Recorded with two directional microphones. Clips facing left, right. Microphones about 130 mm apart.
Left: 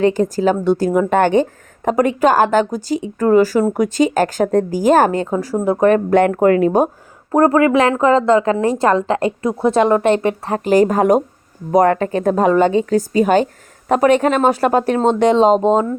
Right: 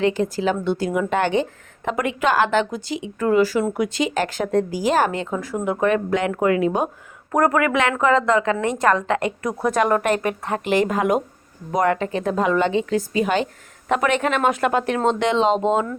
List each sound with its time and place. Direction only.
0.0 s a woman's voice: 40° left (ahead or behind)
7.3 s speech: 30° left (ahead or behind)